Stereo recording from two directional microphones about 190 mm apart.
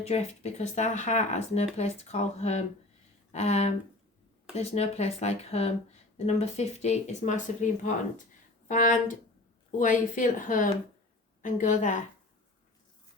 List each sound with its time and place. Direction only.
0.1 s speech: 35° left (ahead or behind)